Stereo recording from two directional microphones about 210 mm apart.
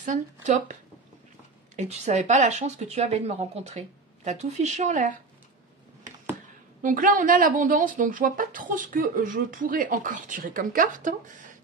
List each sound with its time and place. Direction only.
0.0 s speech: 35° right (ahead or behind)
1.8 s speech: 30° right (ahead or behind)
6.8 s speech: 40° right (ahead or behind)